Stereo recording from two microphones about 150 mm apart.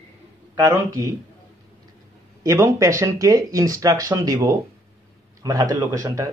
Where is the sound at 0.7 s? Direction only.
20° right (ahead or behind).